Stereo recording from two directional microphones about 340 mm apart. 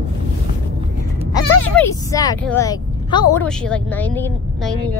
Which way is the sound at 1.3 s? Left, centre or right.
Centre.